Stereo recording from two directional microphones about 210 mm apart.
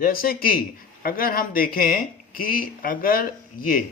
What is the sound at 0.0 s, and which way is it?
Speech, 45° left (ahead or behind).